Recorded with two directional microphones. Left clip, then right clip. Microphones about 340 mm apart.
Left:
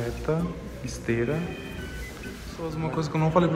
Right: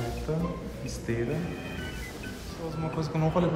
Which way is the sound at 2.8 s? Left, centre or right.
Centre.